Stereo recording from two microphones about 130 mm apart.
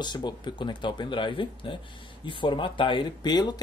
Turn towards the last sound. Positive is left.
turn(degrees=30)  # may be behind; listen again after turning